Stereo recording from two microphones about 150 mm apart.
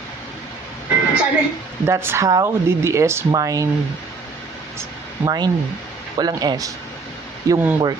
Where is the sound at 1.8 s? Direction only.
15° right (ahead or behind).